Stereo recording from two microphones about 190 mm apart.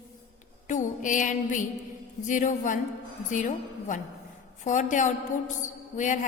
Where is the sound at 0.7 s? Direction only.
40° left (ahead or behind).